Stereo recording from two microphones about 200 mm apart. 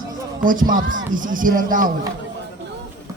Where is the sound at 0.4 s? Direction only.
40° right (ahead or behind).